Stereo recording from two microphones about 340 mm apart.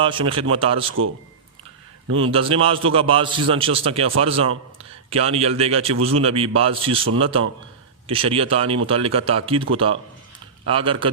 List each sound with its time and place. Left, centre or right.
0.0 s a man's voice: centre
2.3 s a man's voice: centre
10.7 s a man's voice: centre